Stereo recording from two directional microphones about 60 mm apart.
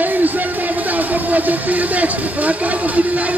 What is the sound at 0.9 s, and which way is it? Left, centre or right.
Speech, right.